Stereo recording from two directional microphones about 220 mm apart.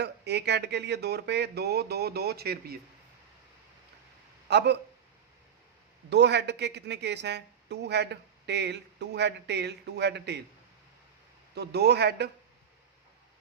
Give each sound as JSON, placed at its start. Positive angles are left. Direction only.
{"t": 0.0, "sound": "speech", "side_deg": -50}
{"t": 4.4, "sound": "speech", "side_deg": -50}
{"t": 6.1, "sound": "speech", "side_deg": -50}
{"t": 11.5, "sound": "speech", "side_deg": -50}